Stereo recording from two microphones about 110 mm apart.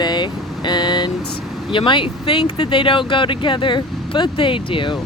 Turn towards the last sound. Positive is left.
turn(degrees=50)  # may be behind; listen again after turning